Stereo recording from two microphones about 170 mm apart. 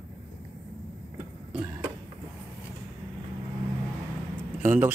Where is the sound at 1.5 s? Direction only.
10° right (ahead or behind).